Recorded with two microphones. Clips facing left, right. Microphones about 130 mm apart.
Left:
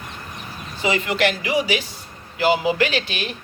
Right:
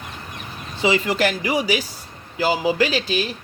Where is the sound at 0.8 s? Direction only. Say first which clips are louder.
Right 3 dB; 30° right (ahead or behind).